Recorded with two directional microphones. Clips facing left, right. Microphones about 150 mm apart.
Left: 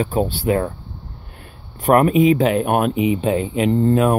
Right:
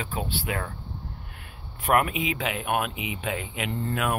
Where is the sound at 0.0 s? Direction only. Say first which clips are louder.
Left 12 dB; 40° left (ahead or behind).